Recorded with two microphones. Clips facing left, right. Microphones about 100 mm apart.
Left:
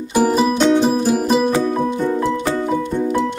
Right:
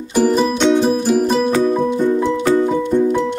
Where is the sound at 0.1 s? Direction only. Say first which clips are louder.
Right 1 dB; 5° left (ahead or behind).